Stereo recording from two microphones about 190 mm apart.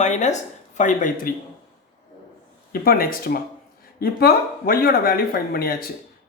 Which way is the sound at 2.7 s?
50° left (ahead or behind).